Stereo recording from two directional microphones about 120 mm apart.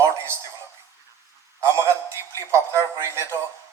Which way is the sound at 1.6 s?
25° right (ahead or behind).